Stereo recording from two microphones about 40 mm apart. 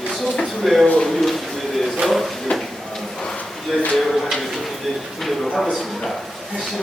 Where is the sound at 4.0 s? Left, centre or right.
Centre.